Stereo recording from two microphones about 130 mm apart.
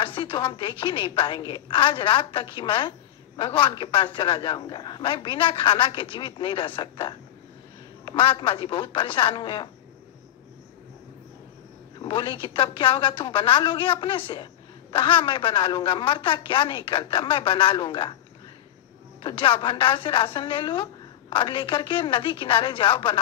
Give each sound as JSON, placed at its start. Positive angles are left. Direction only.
{"t": 0.0, "sound": "a woman's voice", "side_deg": 40}
{"t": 12.0, "sound": "a woman's voice", "side_deg": 40}
{"t": 19.2, "sound": "a woman's voice", "side_deg": 40}